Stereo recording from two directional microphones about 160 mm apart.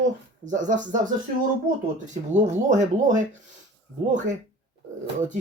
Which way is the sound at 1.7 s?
60° right (ahead or behind).